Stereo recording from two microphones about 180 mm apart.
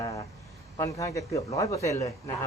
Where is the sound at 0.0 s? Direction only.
25° left (ahead or behind).